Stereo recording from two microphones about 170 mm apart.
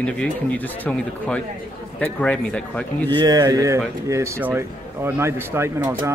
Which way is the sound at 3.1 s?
25° right (ahead or behind).